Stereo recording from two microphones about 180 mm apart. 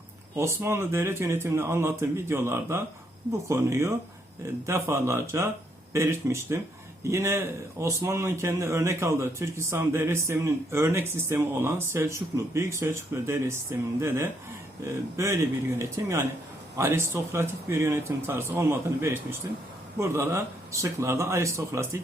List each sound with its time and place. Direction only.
0.3 s speech: 15° right (ahead or behind)